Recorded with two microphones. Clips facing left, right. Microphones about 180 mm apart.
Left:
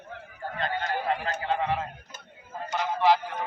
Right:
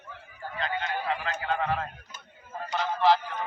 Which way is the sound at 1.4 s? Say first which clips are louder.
Even; 25° left (ahead or behind).